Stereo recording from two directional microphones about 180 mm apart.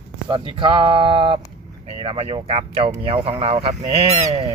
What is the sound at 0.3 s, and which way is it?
Speech, 30° right (ahead or behind).